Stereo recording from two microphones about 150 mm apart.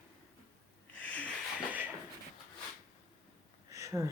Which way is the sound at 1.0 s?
10° left (ahead or behind).